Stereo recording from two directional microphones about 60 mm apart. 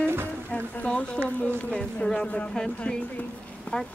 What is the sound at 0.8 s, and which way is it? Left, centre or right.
Speech, centre.